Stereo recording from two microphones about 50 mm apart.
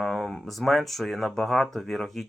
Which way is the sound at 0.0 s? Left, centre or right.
Centre.